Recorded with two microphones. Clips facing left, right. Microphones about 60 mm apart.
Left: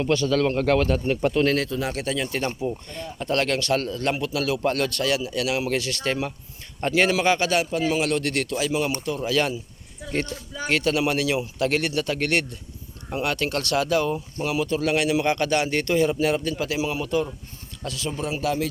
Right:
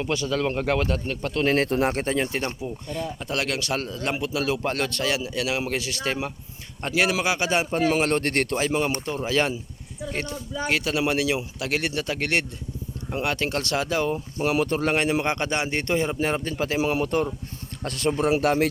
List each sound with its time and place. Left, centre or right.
0.0 s speech: centre
1.0 s speech: centre
1.5 s speech: right
2.9 s a man's voice: centre
7.7 s speech: right
9.2 s a man's voice: right
10.7 s a man's voice: centre
14.4 s a man's voice: right
16.8 s speech: right